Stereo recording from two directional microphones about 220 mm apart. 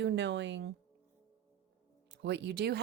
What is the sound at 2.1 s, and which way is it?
Speech, 50° right (ahead or behind).